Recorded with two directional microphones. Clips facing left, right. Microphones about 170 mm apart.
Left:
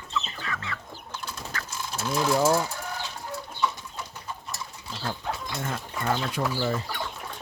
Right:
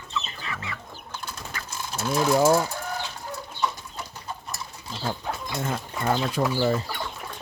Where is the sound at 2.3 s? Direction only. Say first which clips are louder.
Right 3 dB; 20° right (ahead or behind).